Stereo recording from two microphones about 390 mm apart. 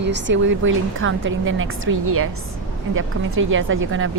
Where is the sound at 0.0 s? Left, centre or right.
Right.